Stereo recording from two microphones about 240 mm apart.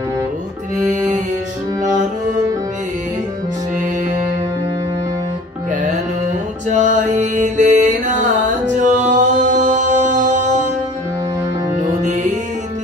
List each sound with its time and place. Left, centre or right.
6.7 s music: right